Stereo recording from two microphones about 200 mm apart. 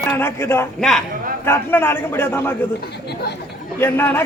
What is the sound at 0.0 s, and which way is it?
A man's voice, 10° left (ahead or behind).